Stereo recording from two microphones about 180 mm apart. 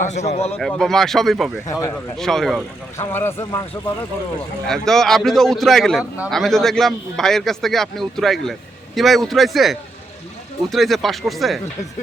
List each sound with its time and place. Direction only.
0.0 s a man's voice: 40° left (ahead or behind)
0.6 s a man's voice: centre (ahead or behind)
1.6 s speech: 20° left (ahead or behind)
2.1 s a man's voice: centre (ahead or behind)
3.0 s speech: 15° left (ahead or behind)
4.6 s a man's voice: centre (ahead or behind)